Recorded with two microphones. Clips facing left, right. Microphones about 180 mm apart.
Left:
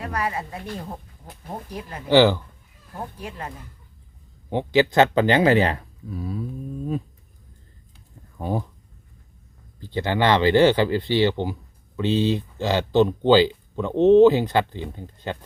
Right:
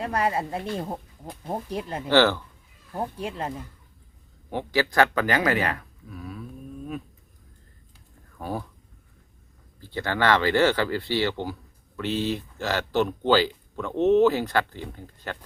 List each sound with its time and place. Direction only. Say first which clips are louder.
0.0 s speech: right 2 dB; 30° right (ahead or behind)
2.0 s speech: left 4 dB; 15° left (ahead or behind)
2.9 s speech: right 4 dB; 25° right (ahead or behind)
4.4 s speech: left 6 dB; 20° left (ahead or behind)
8.4 s speech: left 5 dB; 20° left (ahead or behind)
9.8 s speech: left 3 dB; 20° left (ahead or behind)